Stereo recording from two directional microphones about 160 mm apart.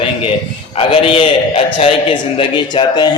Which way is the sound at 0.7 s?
35° left (ahead or behind).